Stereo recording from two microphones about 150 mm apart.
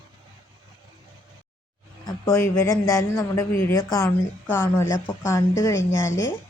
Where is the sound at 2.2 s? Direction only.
20° left (ahead or behind).